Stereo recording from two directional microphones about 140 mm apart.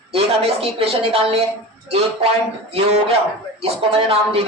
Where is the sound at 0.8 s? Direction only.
45° right (ahead or behind).